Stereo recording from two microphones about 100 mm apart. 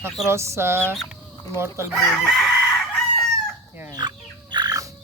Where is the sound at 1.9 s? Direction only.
Centre (ahead or behind).